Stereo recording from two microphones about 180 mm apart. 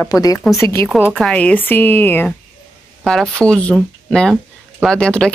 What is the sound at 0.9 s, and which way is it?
Speech, centre (ahead or behind).